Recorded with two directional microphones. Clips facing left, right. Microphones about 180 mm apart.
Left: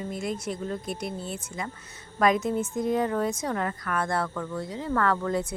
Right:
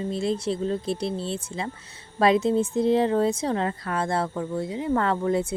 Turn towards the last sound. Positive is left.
turn(degrees=-20)  # may be behind; listen again after turning